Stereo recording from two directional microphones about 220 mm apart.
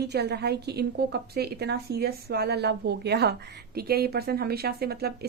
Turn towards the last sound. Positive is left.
turn(degrees=-45)  # may be behind; listen again after turning